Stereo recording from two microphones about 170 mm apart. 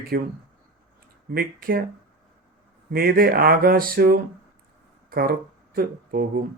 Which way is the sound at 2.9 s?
60° right (ahead or behind).